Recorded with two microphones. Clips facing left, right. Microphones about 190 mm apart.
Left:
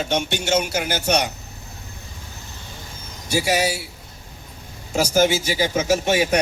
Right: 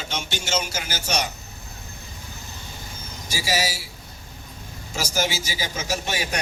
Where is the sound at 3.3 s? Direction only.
60° left (ahead or behind).